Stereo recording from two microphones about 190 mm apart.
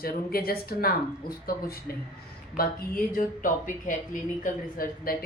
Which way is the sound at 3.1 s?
45° left (ahead or behind).